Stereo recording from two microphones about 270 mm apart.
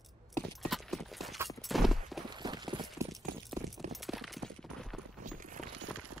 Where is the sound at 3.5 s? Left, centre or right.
Centre.